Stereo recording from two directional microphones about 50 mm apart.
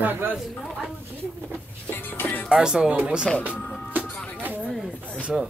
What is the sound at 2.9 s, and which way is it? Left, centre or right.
Speech, right.